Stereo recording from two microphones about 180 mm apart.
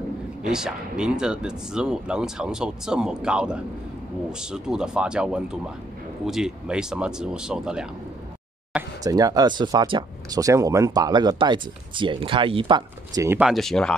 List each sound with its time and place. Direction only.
0.5 s speech: 5° right (ahead or behind)
9.0 s speech: 20° right (ahead or behind)
13.4 s speech: centre (ahead or behind)